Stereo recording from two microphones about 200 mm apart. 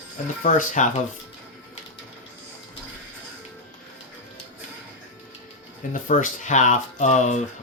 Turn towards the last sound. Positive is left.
turn(degrees=35)  # may be behind; listen again after turning